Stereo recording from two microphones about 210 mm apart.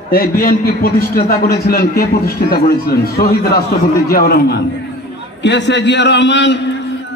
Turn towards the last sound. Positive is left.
turn(degrees=55)  # may be behind; listen again after turning